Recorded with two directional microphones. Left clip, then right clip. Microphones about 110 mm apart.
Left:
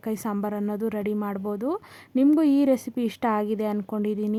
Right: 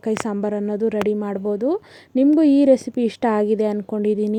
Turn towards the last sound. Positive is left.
turn(degrees=-20)  # may be behind; listen again after turning